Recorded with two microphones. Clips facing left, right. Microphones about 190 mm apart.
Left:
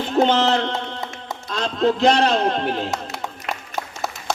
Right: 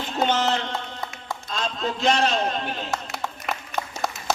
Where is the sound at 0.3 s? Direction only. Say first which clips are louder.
Left 5 dB; 60° left (ahead or behind).